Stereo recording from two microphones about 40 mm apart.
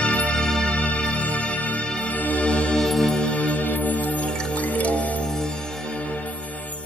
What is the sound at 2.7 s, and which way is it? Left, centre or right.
Music, centre.